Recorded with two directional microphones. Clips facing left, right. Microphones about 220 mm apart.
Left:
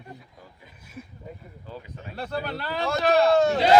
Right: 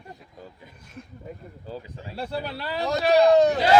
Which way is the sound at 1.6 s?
30° right (ahead or behind).